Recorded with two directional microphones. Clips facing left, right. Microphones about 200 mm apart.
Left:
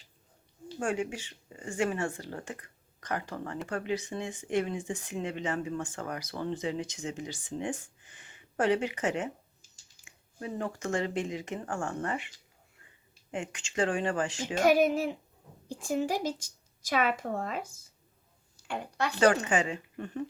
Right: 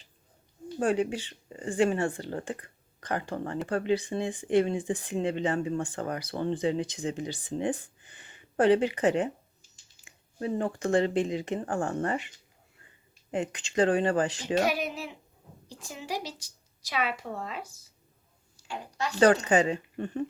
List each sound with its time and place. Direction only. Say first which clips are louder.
0.8 s speech: right 5 dB; 35° right (ahead or behind)
10.4 s speech: right 5 dB; 30° right (ahead or behind)
13.3 s speech: right 5 dB; 35° right (ahead or behind)
14.6 s a woman's voice: left 10 dB; 50° left (ahead or behind)
19.5 s speech: right 5 dB; 35° right (ahead or behind)